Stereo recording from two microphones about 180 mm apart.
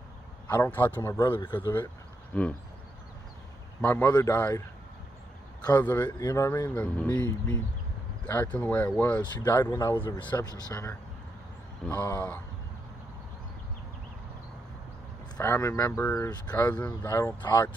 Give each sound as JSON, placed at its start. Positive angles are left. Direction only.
{"t": 0.7, "sound": "speech", "side_deg": 10}
{"t": 3.8, "sound": "speech", "side_deg": 10}
{"t": 5.7, "sound": "speech", "side_deg": 10}
{"t": 11.8, "sound": "speech", "side_deg": 10}
{"t": 15.3, "sound": "speech", "side_deg": 15}